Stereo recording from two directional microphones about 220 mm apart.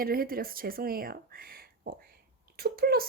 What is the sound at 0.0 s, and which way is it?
Speech, 40° right (ahead or behind).